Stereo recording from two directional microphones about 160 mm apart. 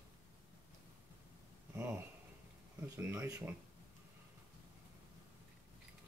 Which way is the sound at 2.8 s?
15° right (ahead or behind).